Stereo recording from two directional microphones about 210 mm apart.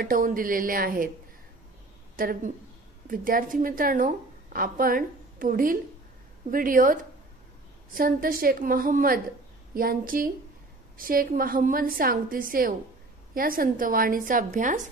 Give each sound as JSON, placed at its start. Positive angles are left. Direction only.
{"t": 0.0, "sound": "a woman's voice", "side_deg": -40}
{"t": 2.1, "sound": "a woman's voice", "side_deg": -40}